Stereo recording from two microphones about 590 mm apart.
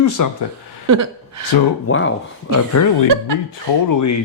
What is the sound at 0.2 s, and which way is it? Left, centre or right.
Speech, left.